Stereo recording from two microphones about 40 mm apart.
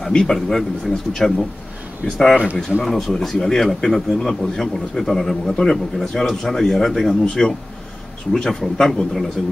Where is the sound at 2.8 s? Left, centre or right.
Centre.